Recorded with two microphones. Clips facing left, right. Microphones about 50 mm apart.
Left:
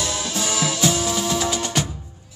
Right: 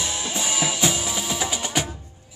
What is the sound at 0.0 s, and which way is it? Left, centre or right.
Music, centre.